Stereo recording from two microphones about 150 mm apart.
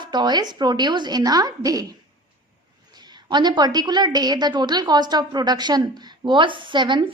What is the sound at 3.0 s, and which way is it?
A woman's voice, 30° right (ahead or behind).